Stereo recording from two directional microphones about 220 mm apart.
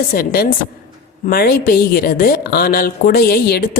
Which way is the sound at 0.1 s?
45° left (ahead or behind).